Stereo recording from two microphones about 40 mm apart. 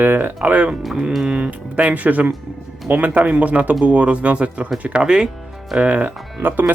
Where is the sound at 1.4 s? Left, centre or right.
Right.